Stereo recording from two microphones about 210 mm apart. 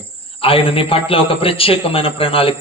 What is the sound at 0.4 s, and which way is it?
A man's voice, 25° left (ahead or behind).